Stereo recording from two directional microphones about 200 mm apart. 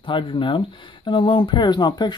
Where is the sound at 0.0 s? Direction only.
25° left (ahead or behind).